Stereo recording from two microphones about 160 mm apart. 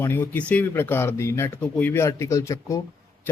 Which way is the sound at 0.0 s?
15° left (ahead or behind).